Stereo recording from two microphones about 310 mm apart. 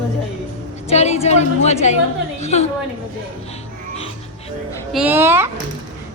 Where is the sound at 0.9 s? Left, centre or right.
Left.